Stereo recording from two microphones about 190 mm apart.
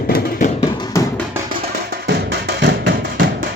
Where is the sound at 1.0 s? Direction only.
15° left (ahead or behind).